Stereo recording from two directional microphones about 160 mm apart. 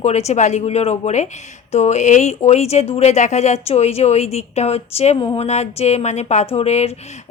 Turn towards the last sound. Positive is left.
turn(degrees=40)  # may be behind; listen again after turning